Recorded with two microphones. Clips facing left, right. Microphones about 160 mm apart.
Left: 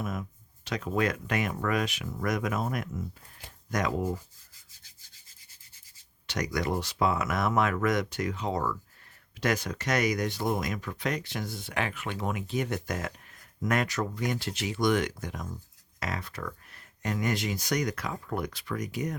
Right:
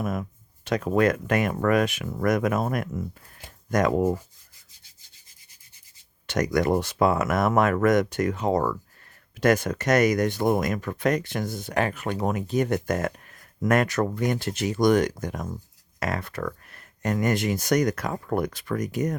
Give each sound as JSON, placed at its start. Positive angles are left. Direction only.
{"t": 0.0, "sound": "speech", "side_deg": -55}
{"t": 6.2, "sound": "speech", "side_deg": -50}